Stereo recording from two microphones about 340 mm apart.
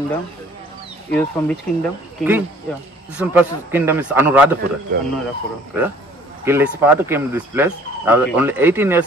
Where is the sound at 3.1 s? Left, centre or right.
Centre.